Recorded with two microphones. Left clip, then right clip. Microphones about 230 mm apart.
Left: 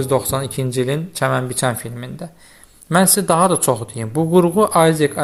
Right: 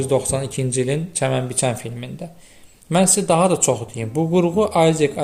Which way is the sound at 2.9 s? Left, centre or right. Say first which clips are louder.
Left 2 dB; left.